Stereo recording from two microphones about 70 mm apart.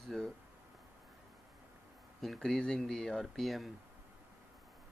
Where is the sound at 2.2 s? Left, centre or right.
Centre.